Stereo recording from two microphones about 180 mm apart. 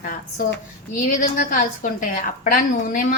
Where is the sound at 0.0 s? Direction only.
50° left (ahead or behind).